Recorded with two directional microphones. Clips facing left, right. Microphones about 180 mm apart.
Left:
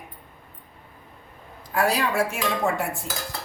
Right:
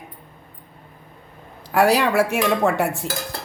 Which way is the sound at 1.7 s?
75° right (ahead or behind).